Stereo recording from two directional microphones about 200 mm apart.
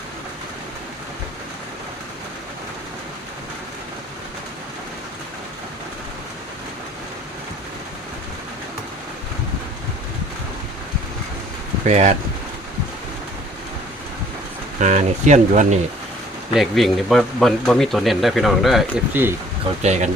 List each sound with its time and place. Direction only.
11.9 s speech: 35° right (ahead or behind)
14.8 s speech: 35° right (ahead or behind)
16.6 s speech: centre (ahead or behind)
19.8 s speech: 35° right (ahead or behind)